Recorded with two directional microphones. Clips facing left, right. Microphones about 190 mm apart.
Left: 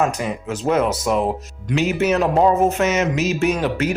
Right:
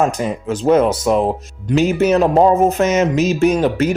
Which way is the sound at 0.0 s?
35° right (ahead or behind).